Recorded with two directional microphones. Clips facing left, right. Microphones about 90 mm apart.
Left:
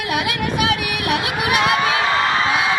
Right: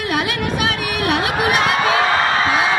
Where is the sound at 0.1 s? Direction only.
35° right (ahead or behind).